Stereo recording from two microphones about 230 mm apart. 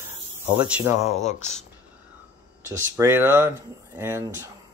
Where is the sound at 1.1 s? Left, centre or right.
Left.